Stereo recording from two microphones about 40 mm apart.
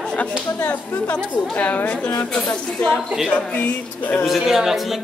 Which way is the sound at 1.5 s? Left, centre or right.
Left.